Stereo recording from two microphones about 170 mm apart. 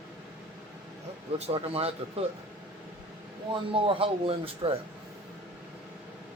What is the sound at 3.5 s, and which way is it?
Speech, 30° right (ahead or behind).